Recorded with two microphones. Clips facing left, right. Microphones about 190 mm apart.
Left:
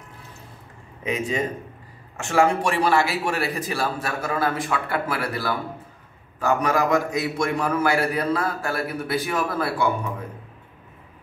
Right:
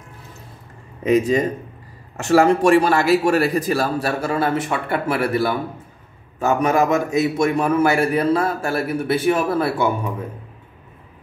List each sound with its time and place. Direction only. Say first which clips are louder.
1.0 s a man's voice: right 8 dB; 40° right (ahead or behind); by 9.9 s 25° right (ahead or behind)